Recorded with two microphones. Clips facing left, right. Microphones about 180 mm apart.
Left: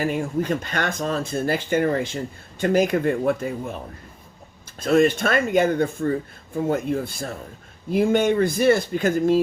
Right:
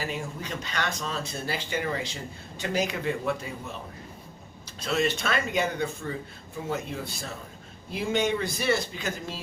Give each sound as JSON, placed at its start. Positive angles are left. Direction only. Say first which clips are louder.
{"t": 0.0, "sound": "speech", "louder": "left 10 dB", "side_deg": 50}
{"t": 4.8, "sound": "speech", "louder": "left 9 dB", "side_deg": 50}